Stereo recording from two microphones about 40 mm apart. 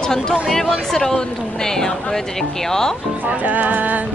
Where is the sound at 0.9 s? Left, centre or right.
Centre.